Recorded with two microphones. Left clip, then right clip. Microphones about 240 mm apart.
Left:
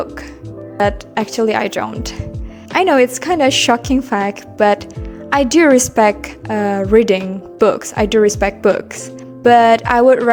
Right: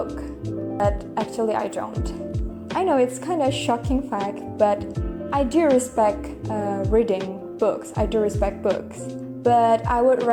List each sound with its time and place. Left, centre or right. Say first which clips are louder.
0.8 s a woman's voice: left 8 dB; left